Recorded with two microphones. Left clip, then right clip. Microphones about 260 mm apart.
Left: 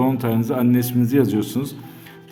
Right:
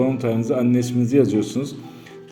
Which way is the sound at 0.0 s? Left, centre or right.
Centre.